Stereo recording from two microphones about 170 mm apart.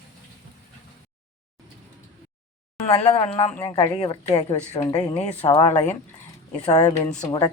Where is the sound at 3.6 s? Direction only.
25° left (ahead or behind).